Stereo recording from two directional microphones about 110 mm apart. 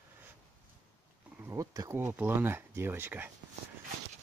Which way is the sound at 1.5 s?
30° right (ahead or behind).